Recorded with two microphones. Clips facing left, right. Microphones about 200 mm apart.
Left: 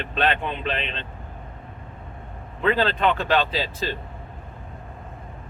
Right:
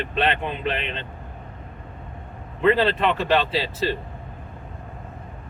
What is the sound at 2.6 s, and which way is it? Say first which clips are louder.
Speech: right 3 dB; 5° right (ahead or behind).